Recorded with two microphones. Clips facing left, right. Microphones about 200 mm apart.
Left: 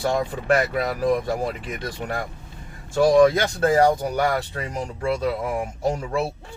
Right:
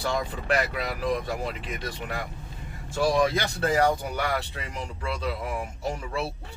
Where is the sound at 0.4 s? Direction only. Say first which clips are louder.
Left 7 dB; 45° left (ahead or behind).